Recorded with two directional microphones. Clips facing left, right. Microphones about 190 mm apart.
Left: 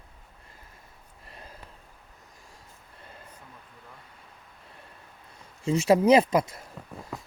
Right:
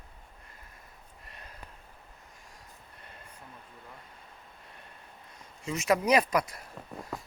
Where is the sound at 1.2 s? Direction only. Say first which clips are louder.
Left 4 dB; 30° left (ahead or behind).